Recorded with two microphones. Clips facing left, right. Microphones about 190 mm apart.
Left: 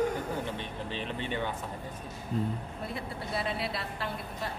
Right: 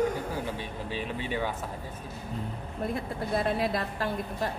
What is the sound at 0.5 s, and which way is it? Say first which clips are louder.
Speech: right 2 dB; 10° right (ahead or behind).